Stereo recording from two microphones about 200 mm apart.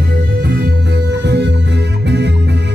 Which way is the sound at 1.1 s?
60° right (ahead or behind).